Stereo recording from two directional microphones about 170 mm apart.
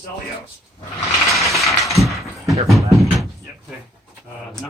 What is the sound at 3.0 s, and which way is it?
Door, centre (ahead or behind).